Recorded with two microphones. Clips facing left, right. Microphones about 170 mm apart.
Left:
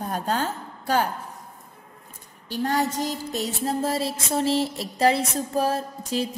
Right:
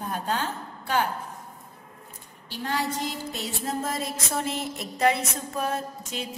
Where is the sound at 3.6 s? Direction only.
30° left (ahead or behind).